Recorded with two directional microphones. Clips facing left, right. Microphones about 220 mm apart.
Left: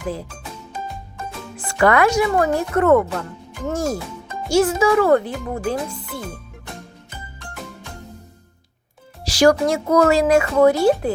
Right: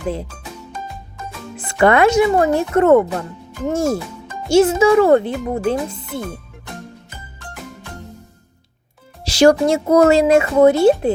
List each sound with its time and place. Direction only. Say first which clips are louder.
1.5 s speech: right 3 dB; 20° right (ahead or behind)
9.2 s speech: right 3 dB; 25° right (ahead or behind)